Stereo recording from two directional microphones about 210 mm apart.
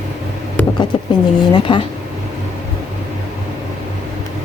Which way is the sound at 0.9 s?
25° left (ahead or behind).